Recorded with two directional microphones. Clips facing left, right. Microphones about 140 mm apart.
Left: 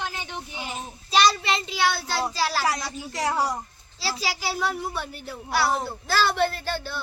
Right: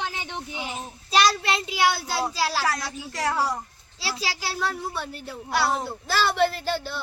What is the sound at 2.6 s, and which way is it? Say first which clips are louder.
Speech: left 1 dB; 15° left (ahead or behind).